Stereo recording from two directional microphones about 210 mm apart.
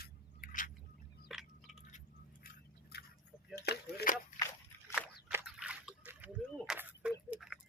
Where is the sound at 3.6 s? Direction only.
50° left (ahead or behind).